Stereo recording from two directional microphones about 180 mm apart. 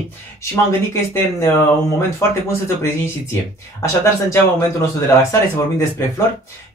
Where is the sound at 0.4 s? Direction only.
15° left (ahead or behind).